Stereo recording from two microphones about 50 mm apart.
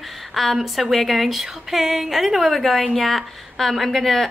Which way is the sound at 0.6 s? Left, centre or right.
Centre.